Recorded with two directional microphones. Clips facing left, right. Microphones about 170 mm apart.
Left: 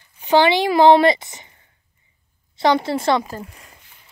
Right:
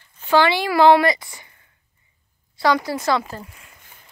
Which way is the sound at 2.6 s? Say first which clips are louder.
Left 2 dB; 25° left (ahead or behind).